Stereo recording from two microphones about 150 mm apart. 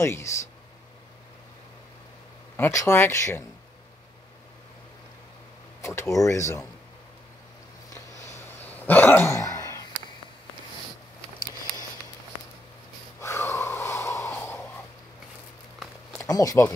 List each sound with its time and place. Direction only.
0.0 s speech: 20° left (ahead or behind)
2.5 s speech: 15° left (ahead or behind)
5.8 s speech: 20° left (ahead or behind)
8.6 s a sound: 10° left (ahead or behind)
13.2 s gasp: 15° left (ahead or behind)
16.2 s speech: 25° left (ahead or behind)